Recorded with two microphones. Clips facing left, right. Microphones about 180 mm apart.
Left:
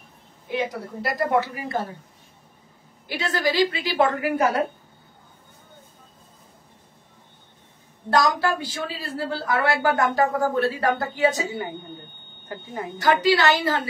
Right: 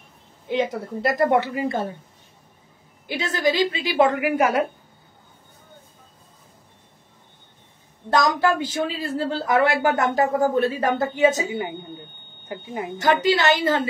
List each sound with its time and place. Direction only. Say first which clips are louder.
0.5 s speech: right 4 dB; 20° right (ahead or behind)
3.1 s speech: right 2 dB; 20° right (ahead or behind)
8.2 s speech: right 2 dB; 20° right (ahead or behind)